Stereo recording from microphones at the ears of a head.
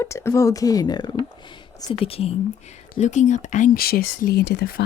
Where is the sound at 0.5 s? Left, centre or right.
Left.